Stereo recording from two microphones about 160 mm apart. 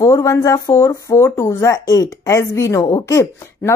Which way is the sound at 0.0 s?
20° left (ahead or behind).